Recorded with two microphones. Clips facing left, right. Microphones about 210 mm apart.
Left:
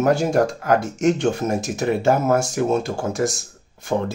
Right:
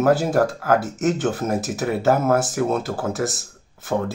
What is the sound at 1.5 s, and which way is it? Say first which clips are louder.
Speech: left 1 dB; 5° right (ahead or behind).